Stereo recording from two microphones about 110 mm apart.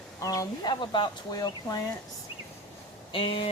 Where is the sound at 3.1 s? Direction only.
55° left (ahead or behind).